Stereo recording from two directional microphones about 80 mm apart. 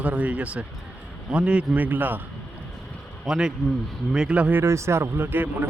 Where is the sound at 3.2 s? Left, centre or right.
Centre.